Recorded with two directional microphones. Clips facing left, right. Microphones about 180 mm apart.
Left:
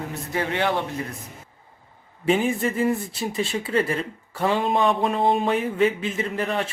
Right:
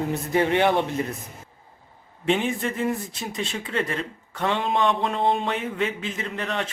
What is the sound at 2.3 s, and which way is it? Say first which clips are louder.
Speech: left 2 dB; 5° left (ahead or behind).